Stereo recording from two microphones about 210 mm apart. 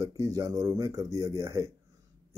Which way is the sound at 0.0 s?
15° right (ahead or behind).